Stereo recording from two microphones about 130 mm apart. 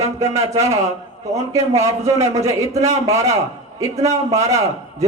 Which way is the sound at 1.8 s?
25° right (ahead or behind).